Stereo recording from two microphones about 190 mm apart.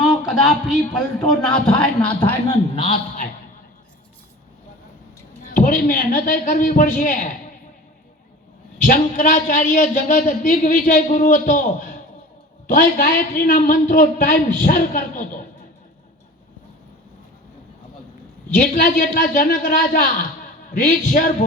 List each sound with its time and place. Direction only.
0.0 s a man's voice: centre (ahead or behind)
2.7 s a man's voice: 30° left (ahead or behind)
5.4 s a man's voice: 45° left (ahead or behind)
8.8 s a man's voice: 45° left (ahead or behind)
18.4 s a man's voice: 45° left (ahead or behind)